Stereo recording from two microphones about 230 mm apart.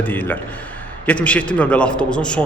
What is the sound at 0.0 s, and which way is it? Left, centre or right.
A man's voice, centre.